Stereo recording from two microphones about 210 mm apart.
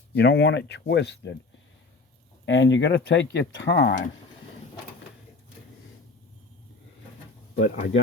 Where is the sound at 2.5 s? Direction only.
60° left (ahead or behind).